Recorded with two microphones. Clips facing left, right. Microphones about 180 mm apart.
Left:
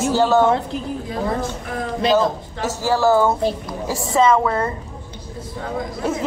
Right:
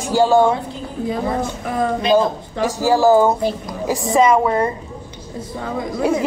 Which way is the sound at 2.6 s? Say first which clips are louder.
Right 3 dB; 15° right (ahead or behind).